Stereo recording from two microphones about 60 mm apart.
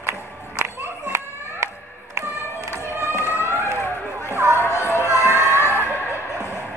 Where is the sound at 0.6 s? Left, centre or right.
Right.